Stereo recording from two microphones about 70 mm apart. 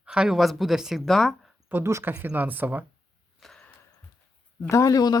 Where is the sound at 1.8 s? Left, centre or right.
Right.